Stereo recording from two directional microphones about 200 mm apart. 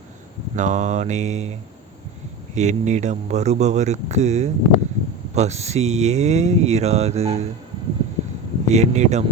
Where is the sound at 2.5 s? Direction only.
35° right (ahead or behind).